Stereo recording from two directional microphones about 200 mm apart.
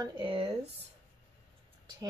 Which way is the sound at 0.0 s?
25° right (ahead or behind).